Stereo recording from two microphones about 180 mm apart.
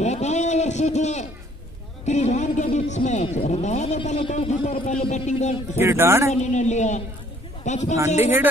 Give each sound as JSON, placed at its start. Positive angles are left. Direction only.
{"t": 0.0, "sound": "a sound", "side_deg": 40}
{"t": 2.0, "sound": "speech", "side_deg": 40}
{"t": 5.8, "sound": "a man's voice", "side_deg": -15}
{"t": 6.3, "sound": "speech", "side_deg": 40}
{"t": 8.2, "sound": "a man's voice", "side_deg": -10}